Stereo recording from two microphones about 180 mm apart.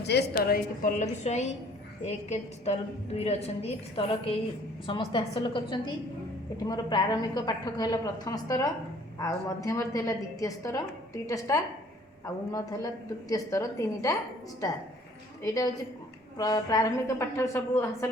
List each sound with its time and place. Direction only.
0.0 s a woman's voice: 65° left (ahead or behind); by 14.2 s 20° left (ahead or behind)
15.4 s a woman's voice: 20° left (ahead or behind)